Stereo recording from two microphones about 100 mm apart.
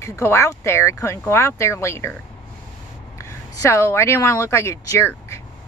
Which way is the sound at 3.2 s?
30° left (ahead or behind).